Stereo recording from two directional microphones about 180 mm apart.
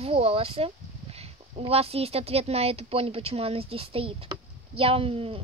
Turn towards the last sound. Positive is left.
turn(degrees=-30)  # may be behind; listen again after turning